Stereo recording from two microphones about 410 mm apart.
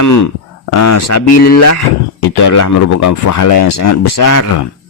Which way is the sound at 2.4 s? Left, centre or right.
Left.